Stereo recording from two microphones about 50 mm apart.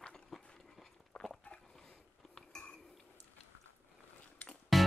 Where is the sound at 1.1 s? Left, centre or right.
Centre.